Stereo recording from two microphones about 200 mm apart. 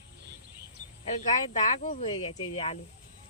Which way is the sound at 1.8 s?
35° left (ahead or behind).